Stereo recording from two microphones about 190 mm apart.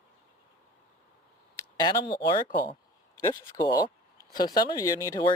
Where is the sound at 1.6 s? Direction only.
20° left (ahead or behind).